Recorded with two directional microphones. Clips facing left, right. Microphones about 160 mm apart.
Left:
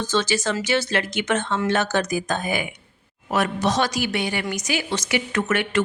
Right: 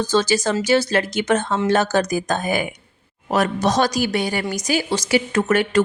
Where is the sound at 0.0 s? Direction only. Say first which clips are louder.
Right 4 dB; 35° right (ahead or behind).